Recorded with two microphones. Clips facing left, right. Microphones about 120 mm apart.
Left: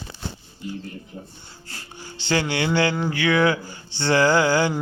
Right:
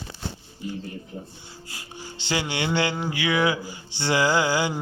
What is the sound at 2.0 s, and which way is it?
Speech, 15° right (ahead or behind).